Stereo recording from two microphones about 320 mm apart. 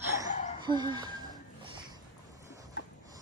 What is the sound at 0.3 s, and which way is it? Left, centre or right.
Laughter, left.